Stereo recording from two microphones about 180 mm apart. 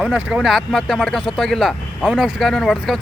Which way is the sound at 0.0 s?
5° right (ahead or behind).